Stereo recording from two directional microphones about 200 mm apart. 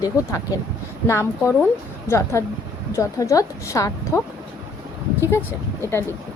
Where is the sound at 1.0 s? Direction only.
15° left (ahead or behind).